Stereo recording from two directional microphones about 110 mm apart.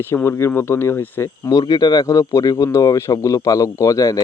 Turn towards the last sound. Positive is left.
turn(degrees=30)  # may be behind; listen again after turning